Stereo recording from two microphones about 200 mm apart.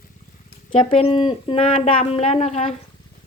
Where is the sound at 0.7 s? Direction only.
25° left (ahead or behind).